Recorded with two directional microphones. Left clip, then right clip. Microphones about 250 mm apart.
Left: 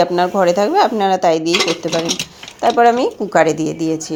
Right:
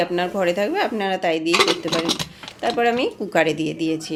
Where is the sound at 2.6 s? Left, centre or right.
Centre.